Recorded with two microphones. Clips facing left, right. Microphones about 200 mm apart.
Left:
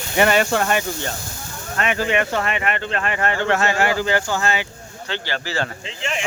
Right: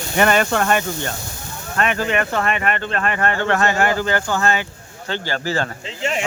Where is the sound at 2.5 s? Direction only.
45° right (ahead or behind).